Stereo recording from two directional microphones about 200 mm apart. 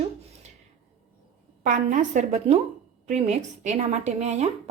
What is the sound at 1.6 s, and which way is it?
A woman's voice, 40° right (ahead or behind).